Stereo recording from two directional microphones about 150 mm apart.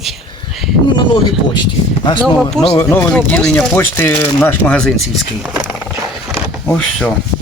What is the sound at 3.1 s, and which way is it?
Speech, 10° left (ahead or behind).